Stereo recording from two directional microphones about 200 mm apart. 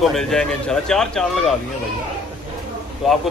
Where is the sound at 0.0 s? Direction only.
Centre (ahead or behind).